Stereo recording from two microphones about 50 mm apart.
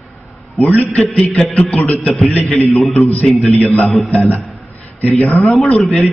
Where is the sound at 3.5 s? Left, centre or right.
Left.